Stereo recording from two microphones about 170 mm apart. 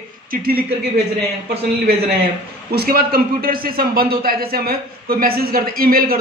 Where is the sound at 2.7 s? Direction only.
65° right (ahead or behind).